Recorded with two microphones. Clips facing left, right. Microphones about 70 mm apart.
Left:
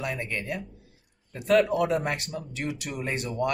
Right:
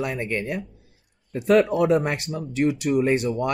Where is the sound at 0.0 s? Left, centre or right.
Right.